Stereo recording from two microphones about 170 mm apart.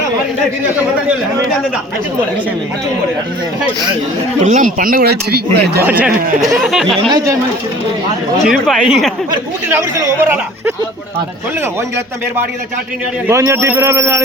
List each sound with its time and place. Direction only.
4.4 s speech: 50° right (ahead or behind); by 5.8 s 70° right (ahead or behind)
5.8 s a man's voice: 10° right (ahead or behind)
7.1 s speech: 20° right (ahead or behind)
8.4 s speech: centre (ahead or behind)
9.6 s a man's voice: 15° right (ahead or behind)
13.2 s a man's voice: 15° right (ahead or behind)